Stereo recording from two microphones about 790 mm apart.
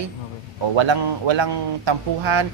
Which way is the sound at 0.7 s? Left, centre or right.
Right.